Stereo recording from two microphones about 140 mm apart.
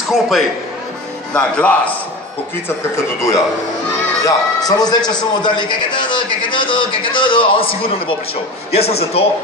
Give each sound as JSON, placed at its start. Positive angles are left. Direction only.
{"t": 0.1, "sound": "a man's voice", "side_deg": 0}
{"t": 4.2, "sound": "a man's voice", "side_deg": 25}